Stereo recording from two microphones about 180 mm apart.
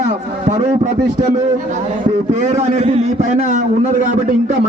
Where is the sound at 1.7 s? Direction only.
40° right (ahead or behind).